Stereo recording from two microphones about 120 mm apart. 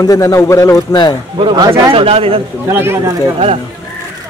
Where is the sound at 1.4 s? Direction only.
45° right (ahead or behind).